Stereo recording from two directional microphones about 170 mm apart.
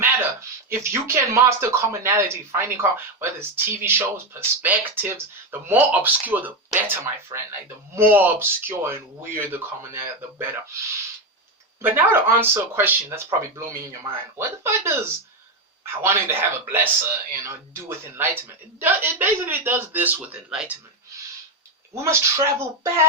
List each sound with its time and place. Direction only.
0.0 s speech: 15° right (ahead or behind)
7.3 s speech: 25° right (ahead or behind)
7.9 s speech: 15° right (ahead or behind)
11.8 s speech: 10° right (ahead or behind)
16.0 s speech: 15° right (ahead or behind)
21.9 s speech: 15° right (ahead or behind)